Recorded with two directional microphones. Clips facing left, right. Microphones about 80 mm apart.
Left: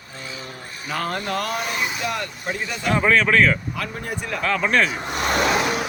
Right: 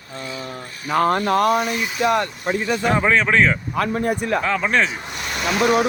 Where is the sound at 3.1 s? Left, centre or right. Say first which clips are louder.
Even; centre.